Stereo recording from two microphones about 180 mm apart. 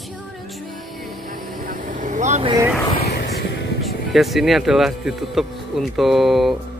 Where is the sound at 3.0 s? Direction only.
70° left (ahead or behind).